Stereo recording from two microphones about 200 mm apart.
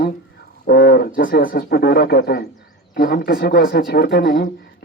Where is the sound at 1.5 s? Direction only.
55° left (ahead or behind).